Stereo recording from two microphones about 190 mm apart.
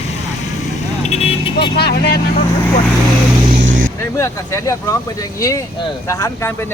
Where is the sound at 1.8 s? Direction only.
55° left (ahead or behind).